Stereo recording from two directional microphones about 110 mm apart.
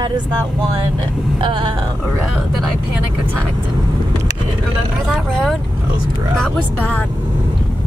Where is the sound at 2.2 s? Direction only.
Centre (ahead or behind).